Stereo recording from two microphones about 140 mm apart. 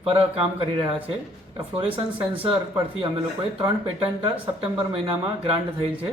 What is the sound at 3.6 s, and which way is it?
Speech, 45° right (ahead or behind).